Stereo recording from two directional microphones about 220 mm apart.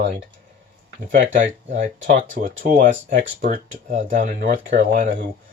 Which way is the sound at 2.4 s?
45° right (ahead or behind).